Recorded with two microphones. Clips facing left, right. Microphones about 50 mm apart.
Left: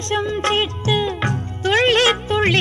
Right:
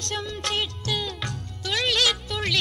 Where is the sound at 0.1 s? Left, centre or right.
Left.